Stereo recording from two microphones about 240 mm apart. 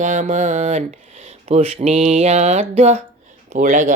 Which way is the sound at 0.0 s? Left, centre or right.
Right.